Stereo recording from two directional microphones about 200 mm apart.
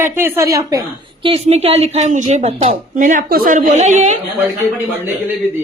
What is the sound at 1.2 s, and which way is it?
A woman's voice, 30° right (ahead or behind).